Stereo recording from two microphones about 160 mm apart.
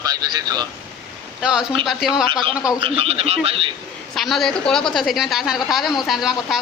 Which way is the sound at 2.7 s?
35° right (ahead or behind).